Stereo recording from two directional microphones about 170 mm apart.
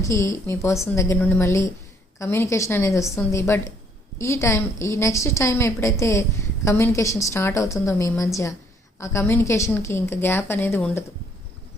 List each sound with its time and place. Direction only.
0.0 s a woman's voice: 20° left (ahead or behind)